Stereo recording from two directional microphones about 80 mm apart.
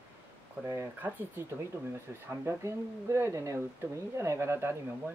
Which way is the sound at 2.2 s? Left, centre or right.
Right.